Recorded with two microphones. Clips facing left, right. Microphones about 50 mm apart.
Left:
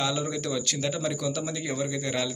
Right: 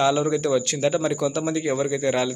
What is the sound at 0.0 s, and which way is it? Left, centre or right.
Speech, right.